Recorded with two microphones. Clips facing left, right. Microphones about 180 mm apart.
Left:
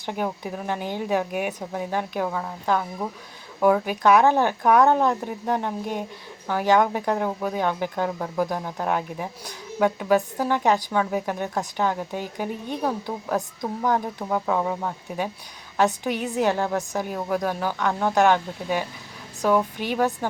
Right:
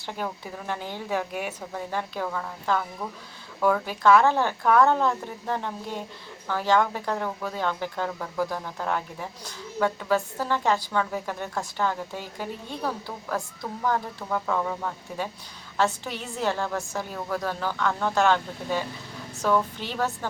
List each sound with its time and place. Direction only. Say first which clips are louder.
0.0 s speech: left 5 dB; 15° left (ahead or behind)